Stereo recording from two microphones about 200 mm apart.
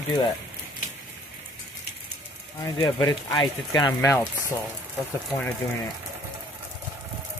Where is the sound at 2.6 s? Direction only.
20° left (ahead or behind).